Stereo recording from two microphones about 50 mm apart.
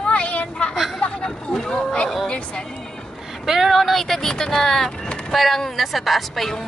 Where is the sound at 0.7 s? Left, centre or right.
Centre.